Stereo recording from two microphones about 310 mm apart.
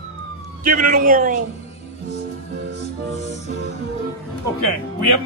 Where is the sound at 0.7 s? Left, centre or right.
Right.